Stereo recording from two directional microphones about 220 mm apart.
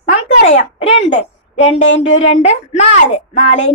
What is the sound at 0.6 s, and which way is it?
A woman's voice, 30° left (ahead or behind).